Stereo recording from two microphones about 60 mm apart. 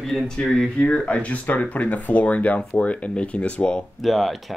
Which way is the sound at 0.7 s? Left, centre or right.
Left.